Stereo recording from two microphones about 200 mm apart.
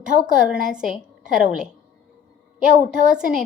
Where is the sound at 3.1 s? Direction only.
5° right (ahead or behind).